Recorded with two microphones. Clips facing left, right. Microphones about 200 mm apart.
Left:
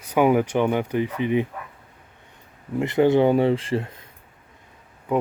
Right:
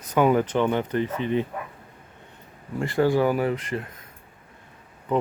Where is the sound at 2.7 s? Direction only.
20° left (ahead or behind).